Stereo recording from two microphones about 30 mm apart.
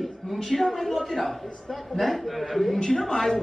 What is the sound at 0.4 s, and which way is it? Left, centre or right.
A man's voice, centre.